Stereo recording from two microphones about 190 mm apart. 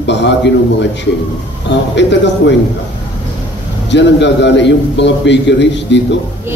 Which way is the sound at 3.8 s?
65° left (ahead or behind).